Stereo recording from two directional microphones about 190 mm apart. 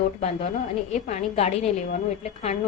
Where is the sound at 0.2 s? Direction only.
30° left (ahead or behind).